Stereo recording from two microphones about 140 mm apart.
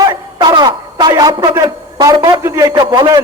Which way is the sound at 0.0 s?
35° right (ahead or behind).